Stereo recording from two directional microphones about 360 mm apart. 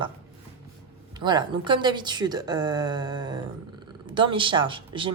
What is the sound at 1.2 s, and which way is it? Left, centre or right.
A woman's voice, centre.